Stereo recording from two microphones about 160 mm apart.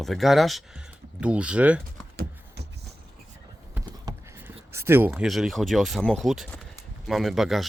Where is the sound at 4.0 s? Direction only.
15° right (ahead or behind).